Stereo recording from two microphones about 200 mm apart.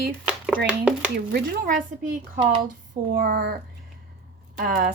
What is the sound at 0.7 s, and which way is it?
Speech, 5° right (ahead or behind).